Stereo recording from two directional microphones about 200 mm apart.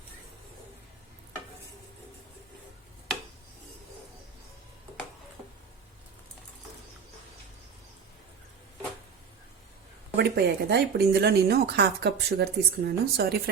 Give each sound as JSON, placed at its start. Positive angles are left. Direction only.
{"t": 10.2, "sound": "speech", "side_deg": -55}